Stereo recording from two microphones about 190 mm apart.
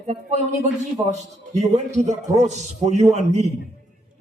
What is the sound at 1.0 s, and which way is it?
A man's voice, 35° right (ahead or behind).